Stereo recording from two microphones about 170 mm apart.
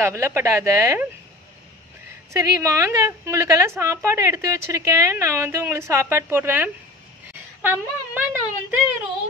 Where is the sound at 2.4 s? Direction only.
20° right (ahead or behind).